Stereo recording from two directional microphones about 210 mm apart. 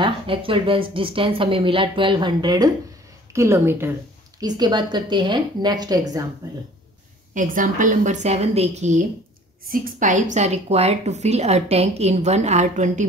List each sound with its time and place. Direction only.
0.0 s a woman's voice: 25° right (ahead or behind)
7.3 s a woman's voice: 40° right (ahead or behind)